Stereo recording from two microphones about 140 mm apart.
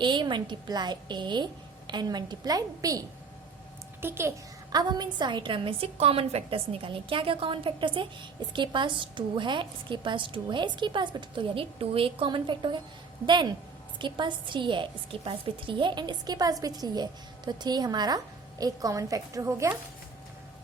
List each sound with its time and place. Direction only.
0.0 s a woman's voice: 35° right (ahead or behind)
4.0 s a child's voice: 15° right (ahead or behind)
4.7 s a woman's voice: 30° right (ahead or behind)